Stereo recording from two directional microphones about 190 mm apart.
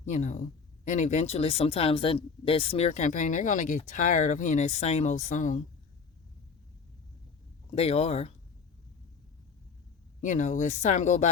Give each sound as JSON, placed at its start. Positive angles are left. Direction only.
{"t": 0.0, "sound": "speech", "side_deg": 40}
{"t": 7.8, "sound": "speech", "side_deg": 35}
{"t": 10.2, "sound": "speech", "side_deg": 40}